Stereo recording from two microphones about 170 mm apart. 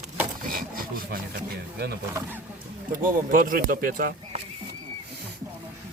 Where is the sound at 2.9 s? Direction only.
55° right (ahead or behind).